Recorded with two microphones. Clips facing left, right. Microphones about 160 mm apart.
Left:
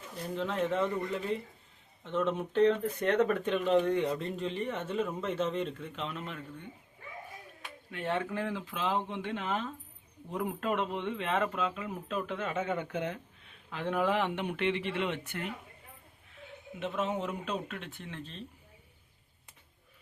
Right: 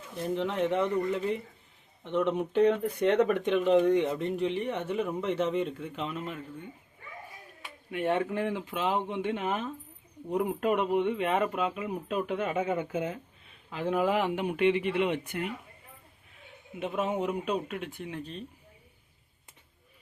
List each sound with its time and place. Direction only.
0.2 s speech: 20° right (ahead or behind); by 6.4 s 5° right (ahead or behind)
7.9 s speech: 15° right (ahead or behind)
16.8 s speech: 15° right (ahead or behind)